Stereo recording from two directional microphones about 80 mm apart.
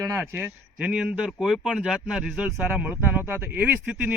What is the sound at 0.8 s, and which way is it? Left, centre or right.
Speech, centre.